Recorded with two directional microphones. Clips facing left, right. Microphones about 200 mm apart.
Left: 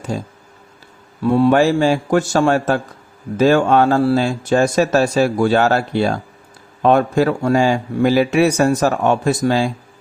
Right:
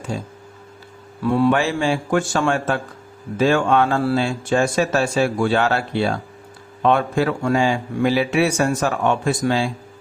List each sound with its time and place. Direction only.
0.1 s speech: 45° left (ahead or behind)
1.2 s a man's voice: 30° left (ahead or behind)
1.5 s a man's voice: 40° left (ahead or behind)